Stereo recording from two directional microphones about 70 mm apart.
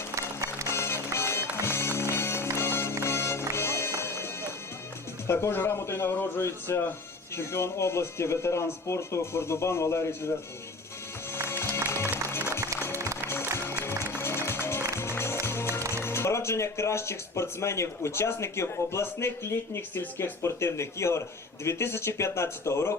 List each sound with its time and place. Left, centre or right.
0.7 s music: left
5.3 s speech: left
11.9 s music: left
15.9 s speech: left
20.4 s speech: left